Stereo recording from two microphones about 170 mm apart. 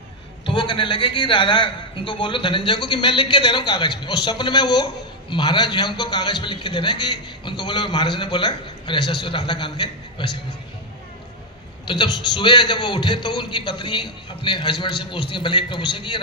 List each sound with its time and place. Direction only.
0.4 s a man's voice: 30° left (ahead or behind)
11.9 s a man's voice: 25° left (ahead or behind)